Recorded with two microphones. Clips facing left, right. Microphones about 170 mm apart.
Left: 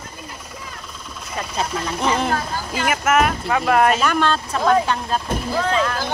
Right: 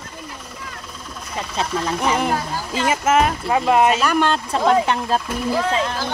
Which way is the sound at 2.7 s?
25° right (ahead or behind).